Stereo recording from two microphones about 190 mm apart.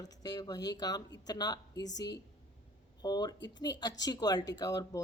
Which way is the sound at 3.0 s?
20° left (ahead or behind).